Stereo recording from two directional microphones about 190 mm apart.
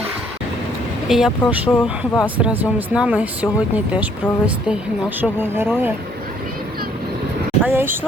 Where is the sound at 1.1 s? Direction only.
5° right (ahead or behind).